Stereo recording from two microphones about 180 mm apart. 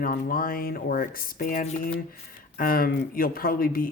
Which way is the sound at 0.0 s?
50° left (ahead or behind).